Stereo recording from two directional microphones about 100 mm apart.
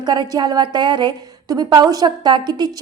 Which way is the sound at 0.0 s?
45° right (ahead or behind).